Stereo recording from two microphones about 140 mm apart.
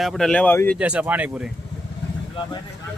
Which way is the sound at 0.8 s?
10° right (ahead or behind).